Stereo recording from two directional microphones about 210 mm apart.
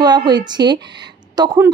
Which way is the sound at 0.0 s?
20° right (ahead or behind).